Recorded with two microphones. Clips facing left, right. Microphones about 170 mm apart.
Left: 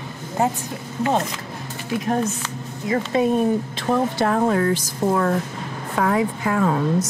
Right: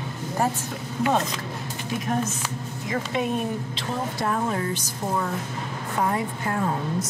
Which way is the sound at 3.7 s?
65° left (ahead or behind).